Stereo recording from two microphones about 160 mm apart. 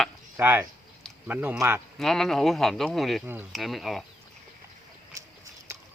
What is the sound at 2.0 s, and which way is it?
Speech, centre (ahead or behind).